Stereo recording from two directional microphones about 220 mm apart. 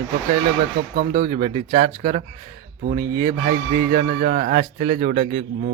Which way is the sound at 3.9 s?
35° right (ahead or behind).